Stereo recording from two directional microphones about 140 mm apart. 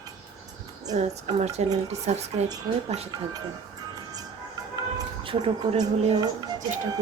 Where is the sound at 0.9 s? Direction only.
55° right (ahead or behind).